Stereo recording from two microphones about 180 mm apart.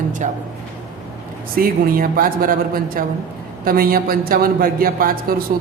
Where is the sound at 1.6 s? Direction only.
55° right (ahead or behind).